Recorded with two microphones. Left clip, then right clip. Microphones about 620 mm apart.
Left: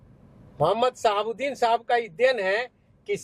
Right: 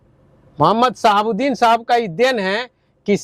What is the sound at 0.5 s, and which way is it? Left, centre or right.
A man's voice, right.